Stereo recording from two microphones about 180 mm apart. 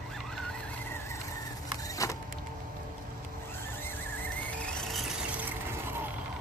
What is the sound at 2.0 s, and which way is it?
Power windows, 20° left (ahead or behind).